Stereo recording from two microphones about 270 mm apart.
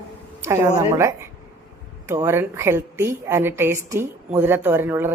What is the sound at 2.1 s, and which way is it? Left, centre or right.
A woman's voice, centre.